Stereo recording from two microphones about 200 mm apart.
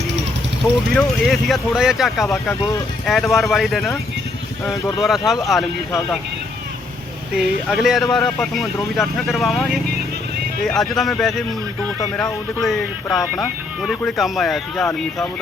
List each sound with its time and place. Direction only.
0.9 s speech: centre (ahead or behind)
2.3 s speech: 10° left (ahead or behind)
5.0 s speech: centre (ahead or behind)
7.3 s speech: centre (ahead or behind)
11.9 s speech: 15° left (ahead or behind)
12.6 s speech: centre (ahead or behind)